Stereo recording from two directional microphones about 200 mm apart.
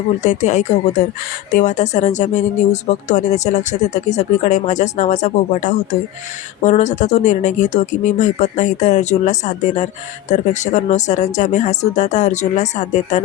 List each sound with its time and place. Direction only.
0.2 s speech: 35° left (ahead or behind)